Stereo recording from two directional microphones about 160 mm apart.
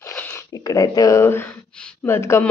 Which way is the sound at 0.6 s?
20° left (ahead or behind).